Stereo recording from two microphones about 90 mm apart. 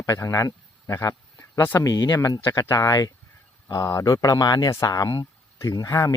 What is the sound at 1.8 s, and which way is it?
Speech, 50° left (ahead or behind).